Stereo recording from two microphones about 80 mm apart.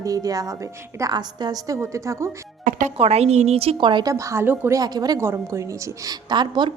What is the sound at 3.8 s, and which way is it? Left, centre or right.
Speech, right.